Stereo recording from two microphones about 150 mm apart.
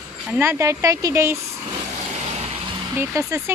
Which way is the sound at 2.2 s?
45° right (ahead or behind).